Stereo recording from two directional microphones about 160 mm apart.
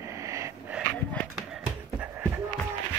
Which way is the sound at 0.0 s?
20° right (ahead or behind).